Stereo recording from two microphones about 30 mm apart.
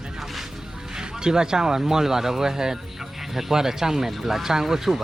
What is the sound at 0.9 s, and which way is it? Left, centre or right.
Speech, right.